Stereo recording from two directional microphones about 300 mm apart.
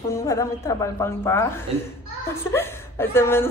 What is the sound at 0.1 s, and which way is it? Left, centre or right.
A woman's voice, centre.